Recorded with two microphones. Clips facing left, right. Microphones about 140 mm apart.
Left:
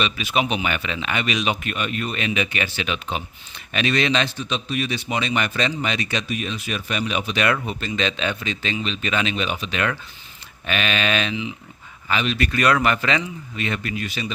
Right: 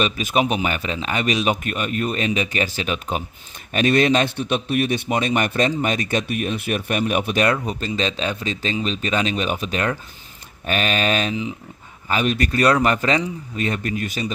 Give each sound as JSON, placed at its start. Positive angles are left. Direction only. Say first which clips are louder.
{"t": 0.0, "sound": "a man's voice", "louder": "right 3 dB", "side_deg": -45}
{"t": 7.7, "sound": "speech", "louder": "right 1 dB", "side_deg": -35}